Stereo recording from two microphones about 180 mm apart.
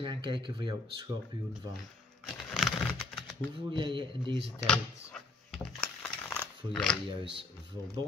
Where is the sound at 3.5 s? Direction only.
25° right (ahead or behind).